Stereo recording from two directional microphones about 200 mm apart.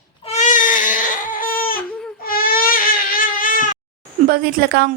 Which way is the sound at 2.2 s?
45° left (ahead or behind).